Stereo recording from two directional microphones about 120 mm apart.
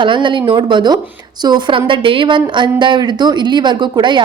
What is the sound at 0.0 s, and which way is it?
A woman's voice, 45° right (ahead or behind).